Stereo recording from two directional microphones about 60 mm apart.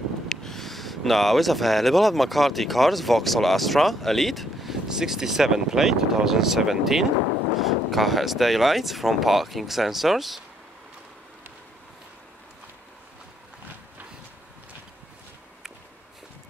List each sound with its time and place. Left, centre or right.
0.3 s speech: centre